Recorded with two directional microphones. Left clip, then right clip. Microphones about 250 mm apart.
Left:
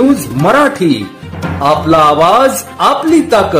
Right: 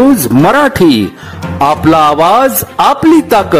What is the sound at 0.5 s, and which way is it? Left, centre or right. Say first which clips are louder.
Speech: even; right.